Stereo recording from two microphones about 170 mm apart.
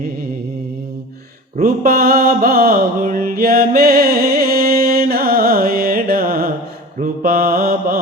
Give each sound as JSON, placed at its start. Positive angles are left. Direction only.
{"t": 1.6, "sound": "mantra", "side_deg": -60}